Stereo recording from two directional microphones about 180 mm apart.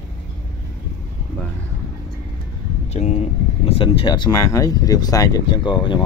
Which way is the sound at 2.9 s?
35° left (ahead or behind).